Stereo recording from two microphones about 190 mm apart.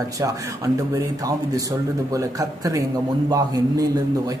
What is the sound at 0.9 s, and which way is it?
A man's voice, 20° right (ahead or behind).